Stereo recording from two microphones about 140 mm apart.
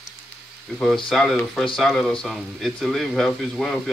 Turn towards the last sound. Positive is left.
turn(degrees=0)  # may be behind; listen again after turning